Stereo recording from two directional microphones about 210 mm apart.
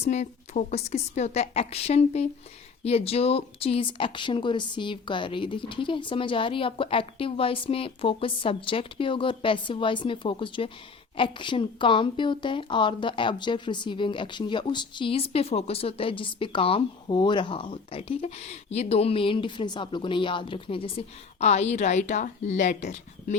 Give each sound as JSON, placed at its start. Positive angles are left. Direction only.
{"t": 0.1, "sound": "a woman's voice", "side_deg": 35}